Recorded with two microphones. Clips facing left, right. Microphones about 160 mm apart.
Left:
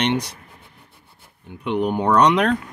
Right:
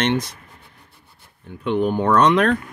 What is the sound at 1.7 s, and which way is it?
Speech, 15° left (ahead or behind).